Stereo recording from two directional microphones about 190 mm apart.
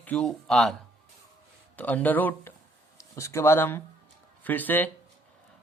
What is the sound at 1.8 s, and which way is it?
Speech, 10° left (ahead or behind).